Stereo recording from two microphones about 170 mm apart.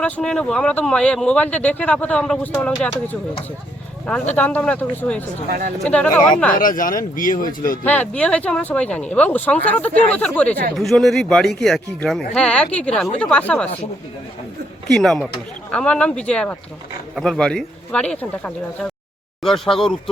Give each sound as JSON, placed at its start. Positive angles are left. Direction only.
{"t": 0.0, "sound": "speech", "side_deg": 5}
{"t": 4.4, "sound": "speech", "side_deg": 10}
{"t": 5.5, "sound": "speech", "side_deg": -55}
{"t": 5.8, "sound": "speech", "side_deg": 5}
{"t": 6.6, "sound": "speech", "side_deg": 55}
{"t": 7.9, "sound": "speech", "side_deg": 10}
{"t": 14.8, "sound": "speech", "side_deg": 0}